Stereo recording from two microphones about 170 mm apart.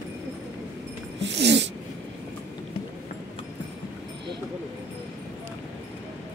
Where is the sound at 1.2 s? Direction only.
90° right.